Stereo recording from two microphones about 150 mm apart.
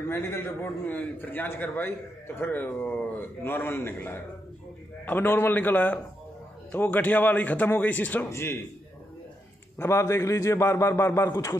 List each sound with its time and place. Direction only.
0.1 s a man's voice: 15° left (ahead or behind)
9.8 s a man's voice: 20° left (ahead or behind)